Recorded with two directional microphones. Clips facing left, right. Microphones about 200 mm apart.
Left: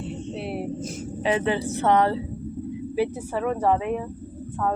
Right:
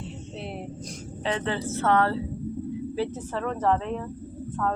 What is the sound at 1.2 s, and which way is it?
A woman's voice, 10° left (ahead or behind).